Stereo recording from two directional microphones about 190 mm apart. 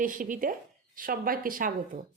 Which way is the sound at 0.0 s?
45° right (ahead or behind).